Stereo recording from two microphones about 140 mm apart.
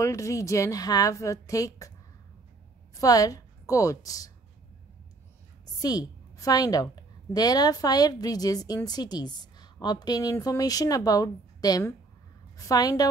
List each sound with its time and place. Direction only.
0.0 s a woman's voice: 20° left (ahead or behind)
3.0 s a woman's voice: 25° left (ahead or behind)
5.8 s a woman's voice: 25° left (ahead or behind)